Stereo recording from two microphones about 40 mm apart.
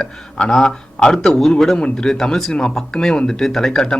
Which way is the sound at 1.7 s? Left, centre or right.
Left.